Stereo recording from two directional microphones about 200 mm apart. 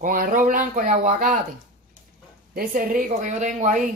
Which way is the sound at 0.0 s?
45° right (ahead or behind).